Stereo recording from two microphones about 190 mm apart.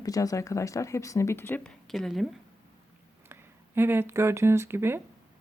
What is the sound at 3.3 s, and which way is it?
Speech, 10° right (ahead or behind).